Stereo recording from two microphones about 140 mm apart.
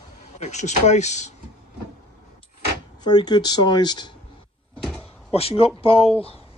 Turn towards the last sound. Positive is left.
turn(degrees=40)  # may be behind; listen again after turning